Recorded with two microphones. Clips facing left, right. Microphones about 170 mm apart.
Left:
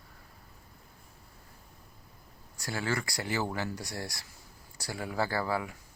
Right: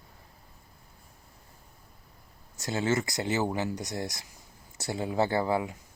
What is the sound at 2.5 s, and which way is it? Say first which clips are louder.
Speech: right 5 dB; 20° right (ahead or behind).